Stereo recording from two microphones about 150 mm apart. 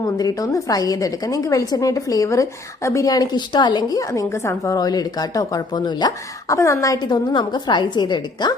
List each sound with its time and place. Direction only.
0.0 s speech: 25° left (ahead or behind)